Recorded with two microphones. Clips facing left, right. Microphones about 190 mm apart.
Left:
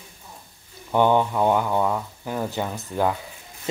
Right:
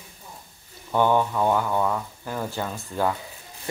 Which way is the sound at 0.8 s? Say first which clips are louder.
Left 2 dB; 20° left (ahead or behind).